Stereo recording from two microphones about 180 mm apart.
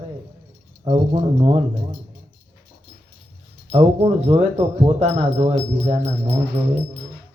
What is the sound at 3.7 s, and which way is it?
Music, 35° right (ahead or behind).